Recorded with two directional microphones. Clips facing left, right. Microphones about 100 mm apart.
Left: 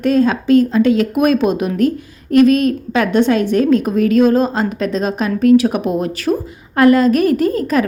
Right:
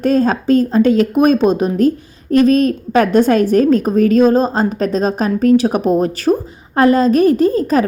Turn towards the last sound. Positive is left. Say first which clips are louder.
# right 2 dB
turn(degrees=-30)  # may be behind; listen again after turning